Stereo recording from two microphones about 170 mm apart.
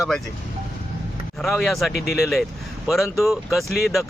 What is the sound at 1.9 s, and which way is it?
Speech, 70° left (ahead or behind).